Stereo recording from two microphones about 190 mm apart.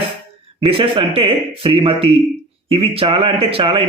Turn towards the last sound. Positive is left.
turn(degrees=-30)  # may be behind; listen again after turning